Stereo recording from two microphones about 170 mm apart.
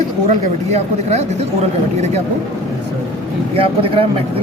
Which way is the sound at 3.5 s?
35° right (ahead or behind).